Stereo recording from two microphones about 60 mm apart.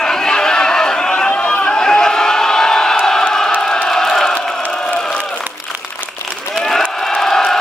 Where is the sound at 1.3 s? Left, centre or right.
Left.